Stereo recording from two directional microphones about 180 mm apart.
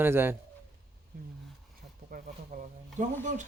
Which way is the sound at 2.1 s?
50° right (ahead or behind).